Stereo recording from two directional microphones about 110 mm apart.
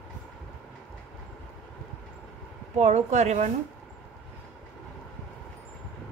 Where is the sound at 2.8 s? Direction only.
90° right.